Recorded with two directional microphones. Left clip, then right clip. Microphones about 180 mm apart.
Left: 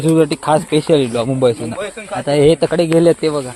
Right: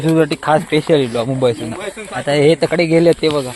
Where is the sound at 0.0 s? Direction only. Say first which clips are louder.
Left 1 dB; 15° left (ahead or behind).